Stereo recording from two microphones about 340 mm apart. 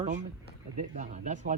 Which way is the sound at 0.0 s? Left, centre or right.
Right.